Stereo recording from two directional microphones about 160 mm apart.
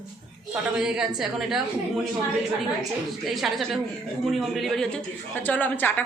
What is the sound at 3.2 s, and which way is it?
A woman's voice, centre (ahead or behind).